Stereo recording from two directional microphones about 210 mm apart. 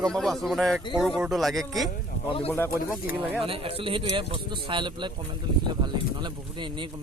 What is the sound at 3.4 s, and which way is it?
Speech, 25° right (ahead or behind).